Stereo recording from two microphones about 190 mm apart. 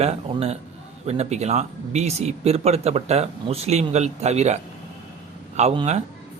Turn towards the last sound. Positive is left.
turn(degrees=-35)  # may be behind; listen again after turning